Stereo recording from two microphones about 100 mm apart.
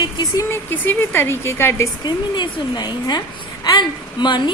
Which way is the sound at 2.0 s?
45° left (ahead or behind).